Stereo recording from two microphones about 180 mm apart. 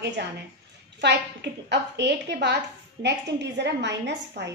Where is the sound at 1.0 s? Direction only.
70° right (ahead or behind).